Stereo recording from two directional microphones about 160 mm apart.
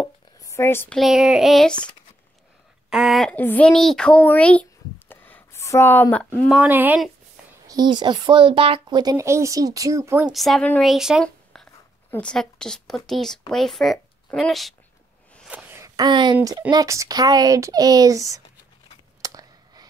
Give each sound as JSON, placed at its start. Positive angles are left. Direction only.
{"t": 0.4, "sound": "speech", "side_deg": 15}
{"t": 0.9, "sound": "speech", "side_deg": 0}
{"t": 2.9, "sound": "speech", "side_deg": 0}
{"t": 3.3, "sound": "speech", "side_deg": 10}
{"t": 6.5, "sound": "speech", "side_deg": -10}
{"t": 7.6, "sound": "speech", "side_deg": -25}
{"t": 10.3, "sound": "a woman's voice", "side_deg": 0}
{"t": 15.4, "sound": "a sound", "side_deg": -10}
{"t": 16.0, "sound": "speech", "side_deg": -30}
{"t": 19.2, "sound": "a sound", "side_deg": -25}